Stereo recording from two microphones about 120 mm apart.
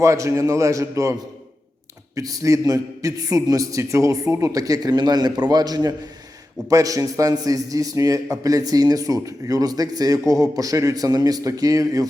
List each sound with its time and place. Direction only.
0.0 s a man's voice: 25° right (ahead or behind)
2.1 s a man's voice: 30° right (ahead or behind)